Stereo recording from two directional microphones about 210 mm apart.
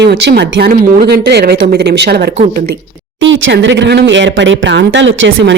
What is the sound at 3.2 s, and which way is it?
Speech, 65° right (ahead or behind).